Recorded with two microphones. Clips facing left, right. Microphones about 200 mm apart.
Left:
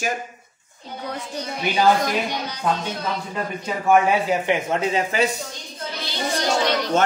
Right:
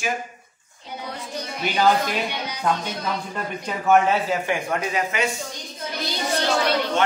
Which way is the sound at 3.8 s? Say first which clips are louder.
Left 1 dB; 15° left (ahead or behind).